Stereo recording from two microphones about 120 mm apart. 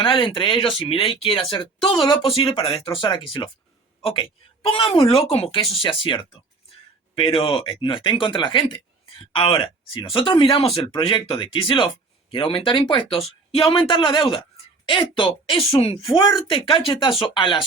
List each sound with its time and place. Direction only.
0.0 s speech: 45° left (ahead or behind)
7.2 s speech: 45° left (ahead or behind)